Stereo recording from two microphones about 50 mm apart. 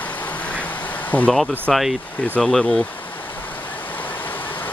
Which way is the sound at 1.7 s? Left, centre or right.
Centre.